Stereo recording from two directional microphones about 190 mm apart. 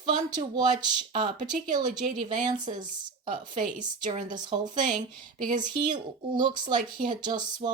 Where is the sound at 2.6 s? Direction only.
40° right (ahead or behind).